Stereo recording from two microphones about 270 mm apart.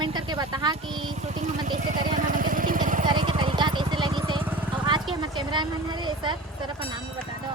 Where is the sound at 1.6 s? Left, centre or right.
Right.